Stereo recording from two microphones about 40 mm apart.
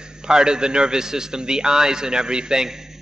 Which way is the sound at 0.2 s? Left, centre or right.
Centre.